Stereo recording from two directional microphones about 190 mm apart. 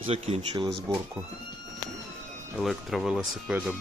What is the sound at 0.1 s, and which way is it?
Speech, 30° right (ahead or behind).